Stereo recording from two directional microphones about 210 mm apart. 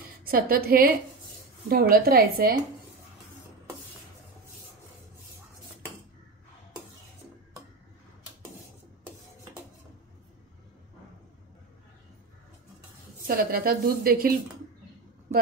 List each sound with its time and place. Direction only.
0.2 s a woman's voice: 45° right (ahead or behind)
13.3 s a woman's voice: 45° right (ahead or behind)